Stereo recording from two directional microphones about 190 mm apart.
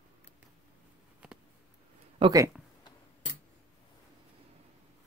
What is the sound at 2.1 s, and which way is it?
Speech, 20° right (ahead or behind).